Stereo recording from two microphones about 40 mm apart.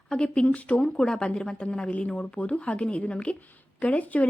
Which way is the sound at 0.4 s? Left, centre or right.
Left.